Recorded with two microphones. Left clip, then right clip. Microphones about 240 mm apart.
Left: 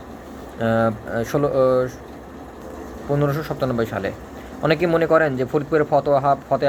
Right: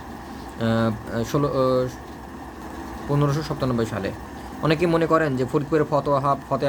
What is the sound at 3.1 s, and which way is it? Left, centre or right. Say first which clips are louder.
Speech: left 3 dB; centre.